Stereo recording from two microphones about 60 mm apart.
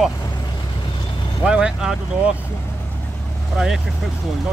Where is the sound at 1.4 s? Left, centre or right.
Centre.